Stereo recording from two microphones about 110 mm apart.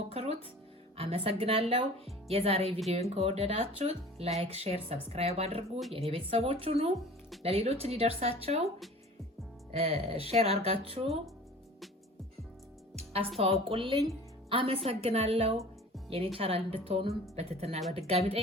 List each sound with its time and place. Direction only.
0.1 s speech: 65° right (ahead or behind)
9.7 s speech: 65° right (ahead or behind)
13.4 s a woman's voice: 60° right (ahead or behind)
14.8 s speech: 65° right (ahead or behind)